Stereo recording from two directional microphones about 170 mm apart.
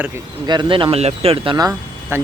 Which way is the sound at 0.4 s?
25° right (ahead or behind).